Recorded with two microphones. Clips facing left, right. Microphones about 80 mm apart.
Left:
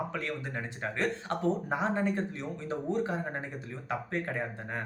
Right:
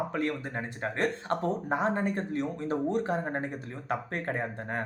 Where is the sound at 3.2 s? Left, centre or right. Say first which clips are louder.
Right 4 dB; right.